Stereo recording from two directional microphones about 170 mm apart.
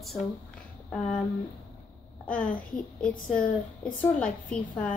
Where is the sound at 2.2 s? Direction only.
10° left (ahead or behind).